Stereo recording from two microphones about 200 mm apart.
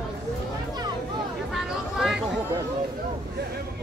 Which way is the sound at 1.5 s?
Centre (ahead or behind).